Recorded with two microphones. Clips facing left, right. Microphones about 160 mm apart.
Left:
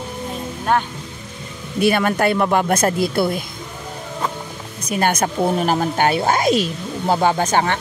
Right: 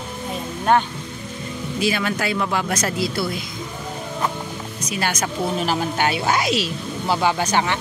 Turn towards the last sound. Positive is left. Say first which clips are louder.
# left 3 dB
turn(degrees=45)  # may be behind; listen again after turning